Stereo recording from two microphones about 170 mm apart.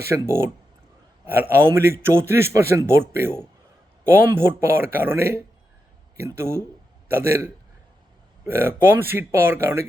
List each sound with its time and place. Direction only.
0.1 s a man's voice: 15° right (ahead or behind)